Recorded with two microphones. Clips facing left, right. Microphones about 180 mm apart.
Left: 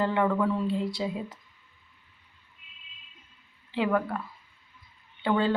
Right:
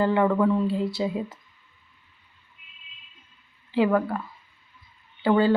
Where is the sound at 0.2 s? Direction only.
25° right (ahead or behind).